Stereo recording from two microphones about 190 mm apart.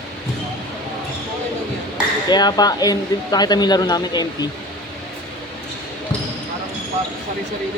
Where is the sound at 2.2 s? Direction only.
20° left (ahead or behind).